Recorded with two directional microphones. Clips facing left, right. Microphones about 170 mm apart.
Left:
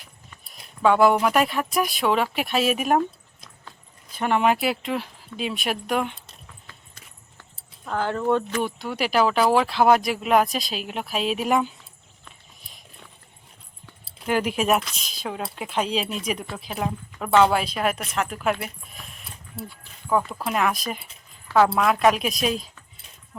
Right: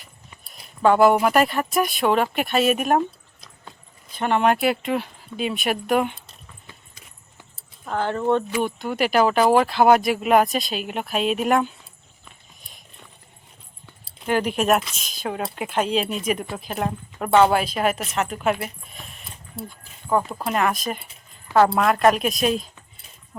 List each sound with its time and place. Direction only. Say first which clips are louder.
0.5 s speech: right 2 dB; centre (ahead or behind)
4.1 s speech: right 1 dB; 5° left (ahead or behind)
7.9 s speech: right 1 dB; 15° right (ahead or behind)
8.5 s speech: right 3 dB; centre (ahead or behind)
14.2 s speech: right 1 dB; 5° left (ahead or behind)
20.1 s speech: right 1 dB; 20° right (ahead or behind)
20.4 s speech: right 2 dB; centre (ahead or behind)